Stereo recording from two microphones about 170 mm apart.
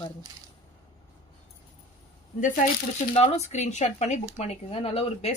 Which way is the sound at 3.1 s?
40° left (ahead or behind).